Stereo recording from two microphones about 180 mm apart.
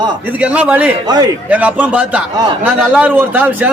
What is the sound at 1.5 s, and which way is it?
A man's voice, 10° right (ahead or behind).